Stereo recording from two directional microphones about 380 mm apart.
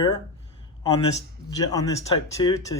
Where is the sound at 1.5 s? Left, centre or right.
Centre.